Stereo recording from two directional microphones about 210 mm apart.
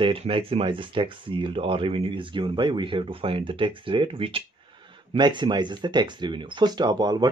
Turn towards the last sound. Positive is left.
turn(degrees=-20)  # may be behind; listen again after turning